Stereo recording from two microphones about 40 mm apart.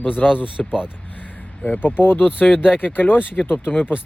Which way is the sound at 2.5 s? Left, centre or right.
Centre.